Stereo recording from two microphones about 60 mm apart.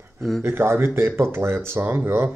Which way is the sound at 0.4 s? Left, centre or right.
Right.